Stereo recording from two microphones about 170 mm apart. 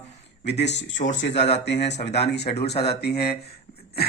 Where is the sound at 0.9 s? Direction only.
45° left (ahead or behind).